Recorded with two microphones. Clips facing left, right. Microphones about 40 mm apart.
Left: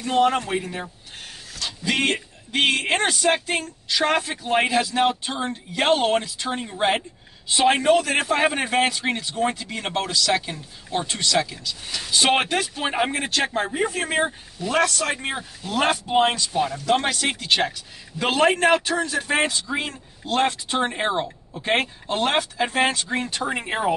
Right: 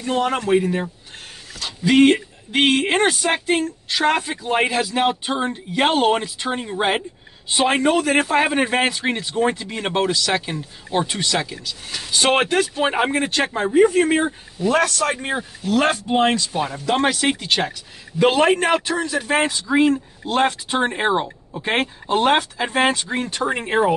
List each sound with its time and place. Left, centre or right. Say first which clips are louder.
0.0 s a man's voice: left 1 dB; centre
6.2 s speech: right 3 dB; right
6.5 s speech: right 1 dB; centre
13.6 s a man's voice: right 8 dB; centre
17.5 s a man's voice: even; centre
23.1 s a man's voice: right 3 dB; centre